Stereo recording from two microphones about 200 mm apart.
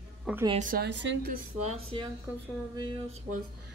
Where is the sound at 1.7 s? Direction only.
30° right (ahead or behind).